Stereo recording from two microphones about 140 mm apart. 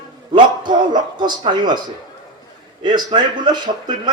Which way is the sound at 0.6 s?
30° right (ahead or behind).